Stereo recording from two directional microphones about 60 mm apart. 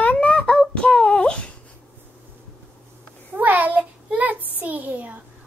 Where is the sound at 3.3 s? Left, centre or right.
Right.